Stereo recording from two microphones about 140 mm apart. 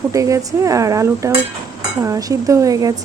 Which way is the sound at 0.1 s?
25° right (ahead or behind).